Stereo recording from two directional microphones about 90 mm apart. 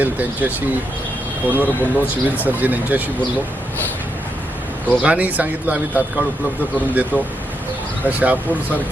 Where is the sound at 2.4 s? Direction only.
20° right (ahead or behind).